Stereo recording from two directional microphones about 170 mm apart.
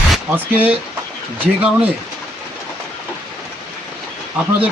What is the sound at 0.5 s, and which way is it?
Speech, 10° right (ahead or behind).